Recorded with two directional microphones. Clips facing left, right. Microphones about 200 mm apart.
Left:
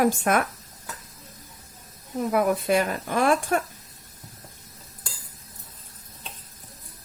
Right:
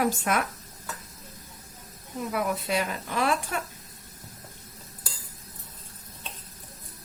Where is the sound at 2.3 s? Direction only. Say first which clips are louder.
Left 6 dB; 50° left (ahead or behind).